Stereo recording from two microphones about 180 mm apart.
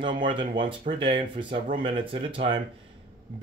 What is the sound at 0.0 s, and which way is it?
Speech, 25° right (ahead or behind).